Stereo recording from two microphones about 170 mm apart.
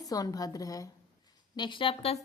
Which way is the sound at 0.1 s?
20° left (ahead or behind).